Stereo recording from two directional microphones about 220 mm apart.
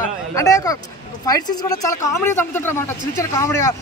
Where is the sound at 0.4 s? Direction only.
15° left (ahead or behind).